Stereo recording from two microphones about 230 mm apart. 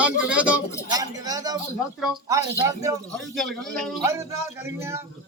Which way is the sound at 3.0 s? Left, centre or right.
Centre.